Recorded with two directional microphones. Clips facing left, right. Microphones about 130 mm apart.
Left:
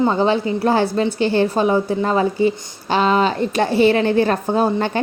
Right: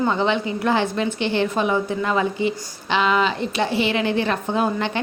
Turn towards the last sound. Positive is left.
turn(degrees=40)  # may be behind; listen again after turning